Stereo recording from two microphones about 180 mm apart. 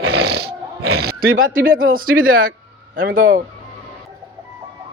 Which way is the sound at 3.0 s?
85° right.